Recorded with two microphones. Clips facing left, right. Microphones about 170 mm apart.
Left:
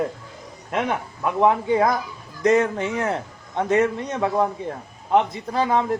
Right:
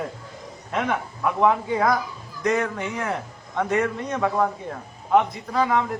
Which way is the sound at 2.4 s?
25° left (ahead or behind).